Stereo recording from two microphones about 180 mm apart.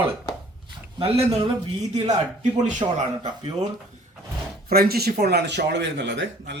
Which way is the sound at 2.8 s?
25° right (ahead or behind).